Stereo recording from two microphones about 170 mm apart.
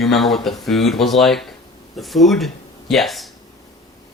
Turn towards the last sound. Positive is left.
turn(degrees=0)  # may be behind; listen again after turning